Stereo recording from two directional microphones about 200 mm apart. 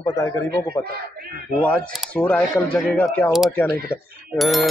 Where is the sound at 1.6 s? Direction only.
5° left (ahead or behind).